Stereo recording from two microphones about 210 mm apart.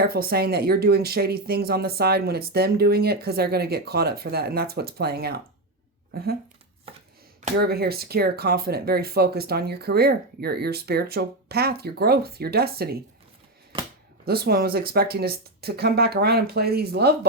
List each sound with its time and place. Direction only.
0.0 s speech: 45° right (ahead or behind)
6.9 s chopping: 25° right (ahead or behind)
7.4 s speech: 50° right (ahead or behind)
14.3 s speech: 50° right (ahead or behind)